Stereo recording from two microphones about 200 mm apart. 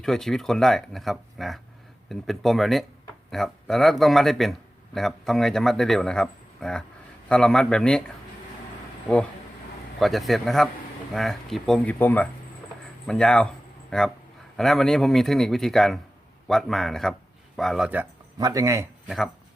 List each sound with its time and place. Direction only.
0.0 s speech: centre (ahead or behind)
9.1 s speech: centre (ahead or behind)
18.3 s speech: 15° right (ahead or behind)